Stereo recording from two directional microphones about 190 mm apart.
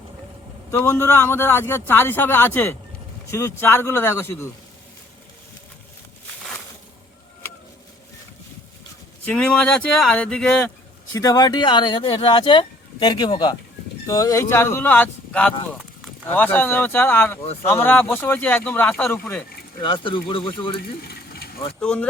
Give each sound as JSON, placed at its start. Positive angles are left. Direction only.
{"t": 0.7, "sound": "a man's voice", "side_deg": 15}
{"t": 9.2, "sound": "speech", "side_deg": 5}
{"t": 11.1, "sound": "a man's voice", "side_deg": 20}
{"t": 19.8, "sound": "speech", "side_deg": 25}
{"t": 21.8, "sound": "speech", "side_deg": 5}